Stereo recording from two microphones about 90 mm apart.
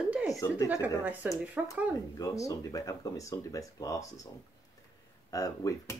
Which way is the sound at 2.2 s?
40° left (ahead or behind).